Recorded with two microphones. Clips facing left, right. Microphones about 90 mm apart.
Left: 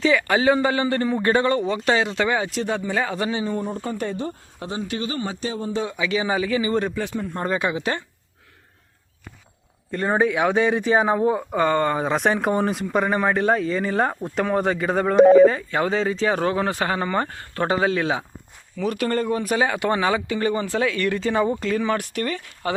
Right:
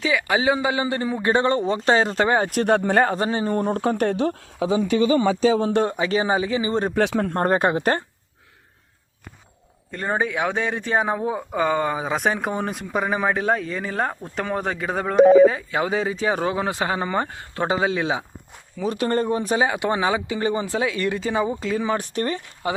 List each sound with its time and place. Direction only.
0.0 s speech: 10° right (ahead or behind); by 2.5 s 40° right (ahead or behind)
2.5 s speech: 55° right (ahead or behind)
3.2 s speech: 40° right (ahead or behind)
3.6 s speech: 70° right (ahead or behind); by 4.4 s 85° right
5.5 s speech: 90° right
5.8 s speech: 45° right (ahead or behind)
6.9 s speech: 90° right
7.3 s speech: 50° right (ahead or behind)
9.9 s speech: centre (ahead or behind)
21.9 s speech: 30° right (ahead or behind)
22.6 s speech: 15° right (ahead or behind)